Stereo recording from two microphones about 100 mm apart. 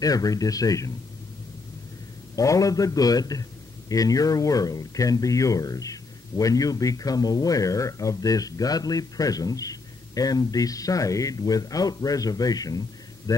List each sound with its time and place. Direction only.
0.0 s speech: 35° left (ahead or behind)
2.3 s speech: 35° left (ahead or behind)